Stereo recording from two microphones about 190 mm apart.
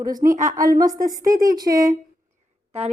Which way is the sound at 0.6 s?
20° right (ahead or behind).